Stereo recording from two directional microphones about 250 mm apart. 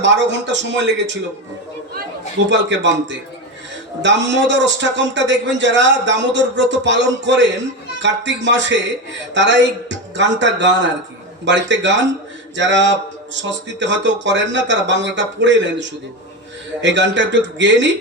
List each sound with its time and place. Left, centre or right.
0.0 s a man's voice: right
2.5 s a man's voice: right